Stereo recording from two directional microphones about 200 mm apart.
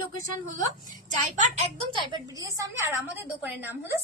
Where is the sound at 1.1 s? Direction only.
35° right (ahead or behind).